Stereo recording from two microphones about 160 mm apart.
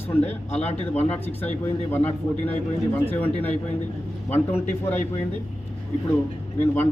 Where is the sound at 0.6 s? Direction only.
45° left (ahead or behind).